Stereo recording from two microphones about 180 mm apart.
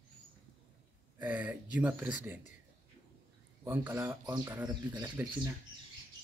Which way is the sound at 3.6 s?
10° right (ahead or behind).